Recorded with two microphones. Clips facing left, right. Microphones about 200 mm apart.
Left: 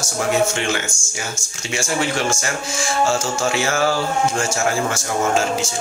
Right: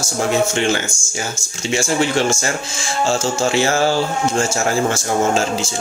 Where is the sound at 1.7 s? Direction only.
25° right (ahead or behind).